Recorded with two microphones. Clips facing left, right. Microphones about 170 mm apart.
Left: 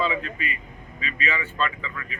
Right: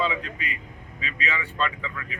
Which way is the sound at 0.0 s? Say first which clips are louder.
Left 1 dB; 15° right (ahead or behind).